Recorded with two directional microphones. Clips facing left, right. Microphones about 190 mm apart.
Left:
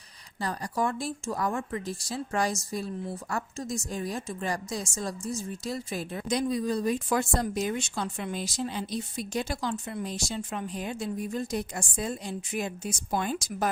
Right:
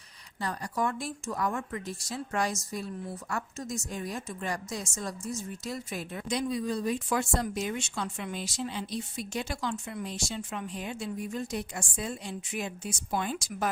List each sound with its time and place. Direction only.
0.3 s a woman's voice: 35° left (ahead or behind)